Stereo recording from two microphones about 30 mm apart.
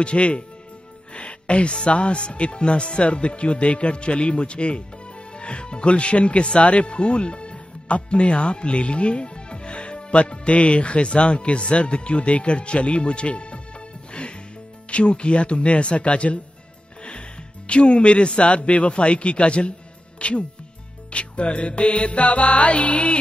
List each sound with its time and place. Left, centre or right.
0.0 s a man's voice: left
1.1 s music: left
1.9 s a man's voice: left
17.6 s a man's voice: left
21.1 s music: left